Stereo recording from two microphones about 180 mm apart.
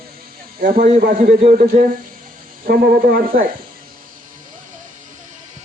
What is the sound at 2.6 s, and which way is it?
Speech, 55° right (ahead or behind).